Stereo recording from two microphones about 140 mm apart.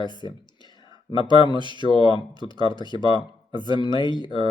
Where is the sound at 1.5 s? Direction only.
35° right (ahead or behind).